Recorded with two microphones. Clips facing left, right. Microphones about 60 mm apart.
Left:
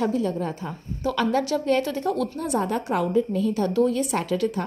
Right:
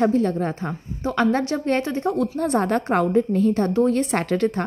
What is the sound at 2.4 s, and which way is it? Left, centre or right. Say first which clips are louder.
A woman's voice: right 4 dB; right.